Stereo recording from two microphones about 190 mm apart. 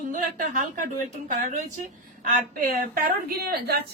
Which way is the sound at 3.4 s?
55° right (ahead or behind).